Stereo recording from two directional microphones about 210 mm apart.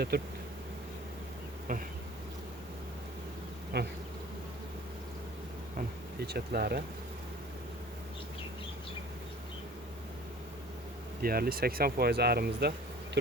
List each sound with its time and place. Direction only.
0.1 s speech: 50° right (ahead or behind)
3.7 s speech: 50° right (ahead or behind)
5.7 s speech: 50° right (ahead or behind)
11.2 s speech: 45° right (ahead or behind)